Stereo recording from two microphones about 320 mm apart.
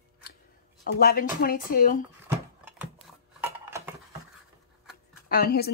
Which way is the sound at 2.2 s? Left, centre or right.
Centre.